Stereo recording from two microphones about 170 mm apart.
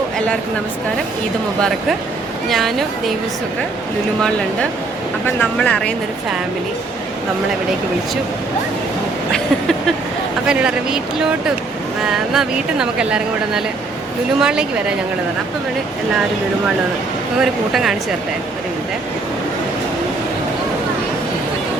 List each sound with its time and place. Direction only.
2.5 s speech: centre (ahead or behind)
5.2 s speech: 10° left (ahead or behind)
9.3 s a sound: centre (ahead or behind)
10.4 s speech: 5° right (ahead or behind)
12.1 s speech: centre (ahead or behind)
17.3 s speech: centre (ahead or behind)